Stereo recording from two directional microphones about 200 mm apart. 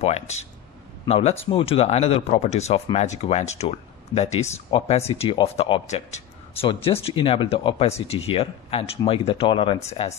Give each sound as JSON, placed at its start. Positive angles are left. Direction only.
{"t": 0.0, "sound": "speech", "side_deg": 30}